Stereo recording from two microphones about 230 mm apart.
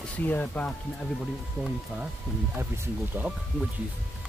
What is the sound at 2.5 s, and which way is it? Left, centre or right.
Speech, centre.